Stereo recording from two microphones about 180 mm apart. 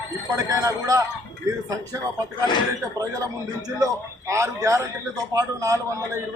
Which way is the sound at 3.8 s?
20° right (ahead or behind).